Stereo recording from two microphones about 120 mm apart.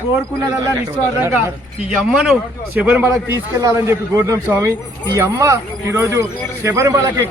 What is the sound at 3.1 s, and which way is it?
A man's voice, 30° right (ahead or behind).